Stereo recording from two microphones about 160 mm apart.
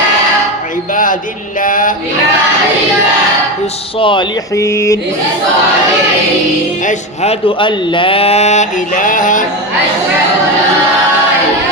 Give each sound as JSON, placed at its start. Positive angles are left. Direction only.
{"t": 1.6, "sound": "male singing", "side_deg": 60}
{"t": 4.0, "sound": "speech", "side_deg": 30}
{"t": 4.5, "sound": "mantra", "side_deg": 20}
{"t": 6.8, "sound": "speech", "side_deg": 40}